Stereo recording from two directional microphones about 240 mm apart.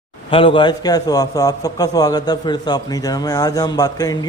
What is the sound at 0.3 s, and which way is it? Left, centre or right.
A man's voice, left.